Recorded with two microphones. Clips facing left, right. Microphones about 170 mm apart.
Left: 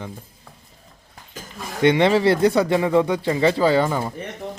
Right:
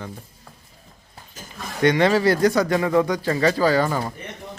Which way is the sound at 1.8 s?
25° left (ahead or behind).